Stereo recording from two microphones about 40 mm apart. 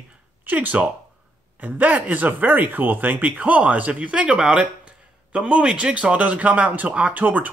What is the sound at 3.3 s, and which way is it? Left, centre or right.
Speech, right.